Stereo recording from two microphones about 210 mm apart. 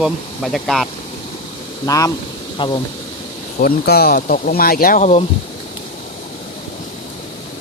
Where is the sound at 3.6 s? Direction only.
45° left (ahead or behind).